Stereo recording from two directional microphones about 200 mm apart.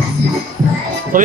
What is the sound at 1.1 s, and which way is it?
Speech, 45° right (ahead or behind).